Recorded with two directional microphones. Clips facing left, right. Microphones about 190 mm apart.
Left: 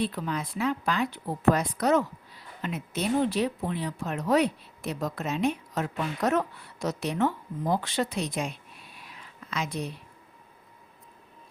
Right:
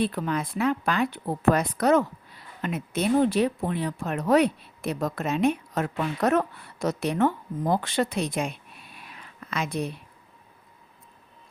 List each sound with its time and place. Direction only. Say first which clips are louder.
0.0 s a woman's voice: right 4 dB; 55° right (ahead or behind)
9.0 s whispering: right 3 dB; 55° right (ahead or behind)